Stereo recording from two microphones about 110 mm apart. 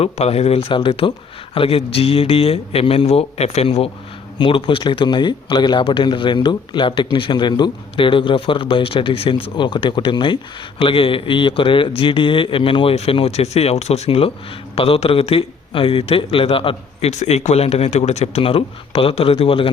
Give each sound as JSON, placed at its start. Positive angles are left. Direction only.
{"t": 0.0, "sound": "speech", "side_deg": 70}
{"t": 4.4, "sound": "speech", "side_deg": 50}